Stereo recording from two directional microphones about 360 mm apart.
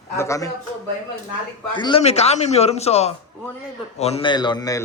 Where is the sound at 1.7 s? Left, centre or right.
Centre.